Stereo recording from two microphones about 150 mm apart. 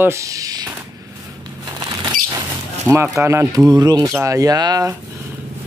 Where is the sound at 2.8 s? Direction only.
15° right (ahead or behind).